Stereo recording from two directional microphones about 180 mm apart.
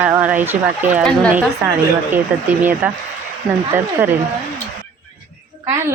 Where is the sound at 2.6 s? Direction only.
10° right (ahead or behind).